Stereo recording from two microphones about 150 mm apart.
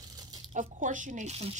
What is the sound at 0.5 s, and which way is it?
Speech, 60° right (ahead or behind).